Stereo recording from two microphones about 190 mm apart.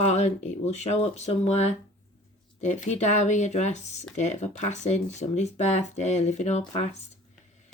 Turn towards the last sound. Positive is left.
turn(degrees=35)  # may be behind; listen again after turning